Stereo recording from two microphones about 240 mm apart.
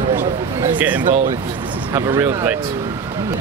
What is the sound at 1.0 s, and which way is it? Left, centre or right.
Speech, right.